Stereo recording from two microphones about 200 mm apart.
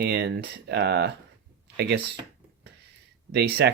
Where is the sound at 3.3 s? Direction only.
55° right (ahead or behind).